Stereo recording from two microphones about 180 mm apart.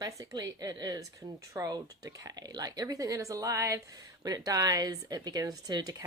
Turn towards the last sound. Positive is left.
turn(degrees=-20)  # may be behind; listen again after turning